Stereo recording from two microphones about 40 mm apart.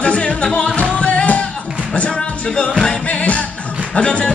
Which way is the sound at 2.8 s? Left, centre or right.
Left.